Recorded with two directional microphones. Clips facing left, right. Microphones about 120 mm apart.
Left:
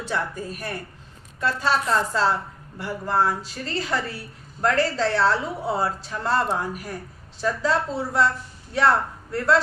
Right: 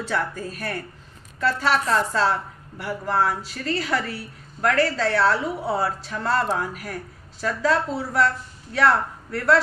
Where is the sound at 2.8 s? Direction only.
25° left (ahead or behind).